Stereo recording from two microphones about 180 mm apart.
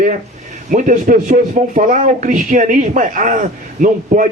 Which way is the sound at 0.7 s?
45° right (ahead or behind).